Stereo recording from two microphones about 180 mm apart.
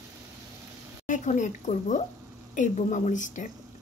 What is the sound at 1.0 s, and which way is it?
Speech, 45° left (ahead or behind).